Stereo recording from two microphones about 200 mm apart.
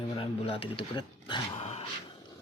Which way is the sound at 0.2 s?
30° left (ahead or behind).